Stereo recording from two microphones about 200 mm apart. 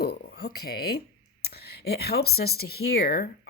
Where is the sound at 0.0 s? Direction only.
55° left (ahead or behind).